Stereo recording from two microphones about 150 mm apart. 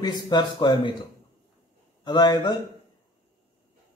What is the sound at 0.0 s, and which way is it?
Speech, 30° left (ahead or behind).